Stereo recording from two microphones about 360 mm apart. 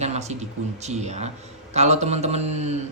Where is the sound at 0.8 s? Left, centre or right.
Centre.